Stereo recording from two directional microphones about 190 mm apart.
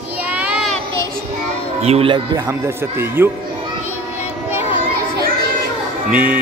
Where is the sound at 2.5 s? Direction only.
10° right (ahead or behind).